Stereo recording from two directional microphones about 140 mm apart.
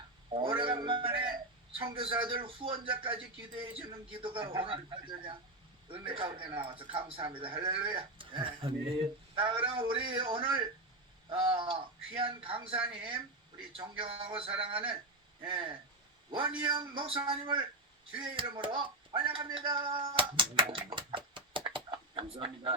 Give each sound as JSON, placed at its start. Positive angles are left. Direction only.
{"t": 0.6, "sound": "music", "side_deg": -35}
{"t": 1.8, "sound": "speech", "side_deg": -40}